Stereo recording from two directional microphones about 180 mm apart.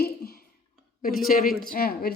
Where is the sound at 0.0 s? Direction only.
55° left (ahead or behind).